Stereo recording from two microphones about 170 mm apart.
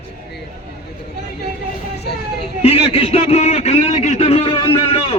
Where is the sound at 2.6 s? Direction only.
35° left (ahead or behind).